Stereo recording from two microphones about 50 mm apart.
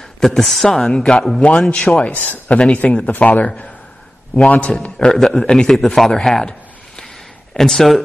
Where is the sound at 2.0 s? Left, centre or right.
Left.